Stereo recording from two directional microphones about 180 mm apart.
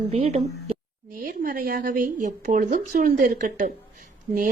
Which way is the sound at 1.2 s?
50° right (ahead or behind).